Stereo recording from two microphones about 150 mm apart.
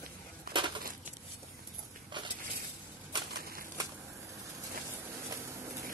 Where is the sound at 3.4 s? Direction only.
75° right (ahead or behind).